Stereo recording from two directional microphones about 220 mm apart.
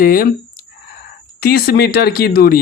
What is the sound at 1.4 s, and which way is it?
Speech, 45° left (ahead or behind).